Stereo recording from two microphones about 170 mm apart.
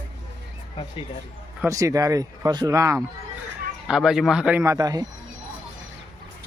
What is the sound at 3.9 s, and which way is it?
Speech, 5° right (ahead or behind).